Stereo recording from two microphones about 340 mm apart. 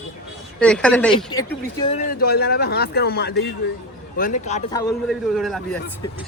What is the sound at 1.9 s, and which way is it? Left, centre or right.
Speech, left.